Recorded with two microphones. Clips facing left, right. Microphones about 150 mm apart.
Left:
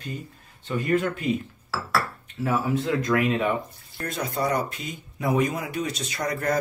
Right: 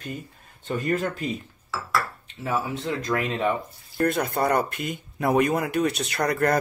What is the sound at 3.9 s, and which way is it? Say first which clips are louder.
Speech: right 6 dB; 55° right (ahead or behind).